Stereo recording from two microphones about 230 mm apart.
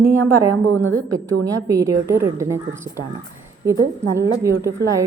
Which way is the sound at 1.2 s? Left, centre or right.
Centre.